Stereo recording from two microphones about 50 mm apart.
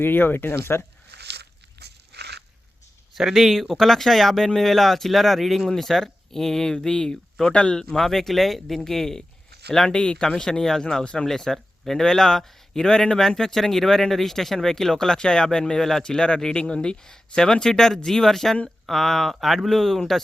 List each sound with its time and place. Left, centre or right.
0.0 s speech: left
3.2 s a man's voice: centre; by 7.9 s left
7.9 s a man's voice: centre
11.3 s a man's voice: centre